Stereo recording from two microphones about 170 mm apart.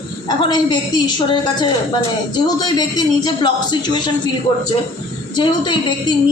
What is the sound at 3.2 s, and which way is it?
Speech, 25° left (ahead or behind).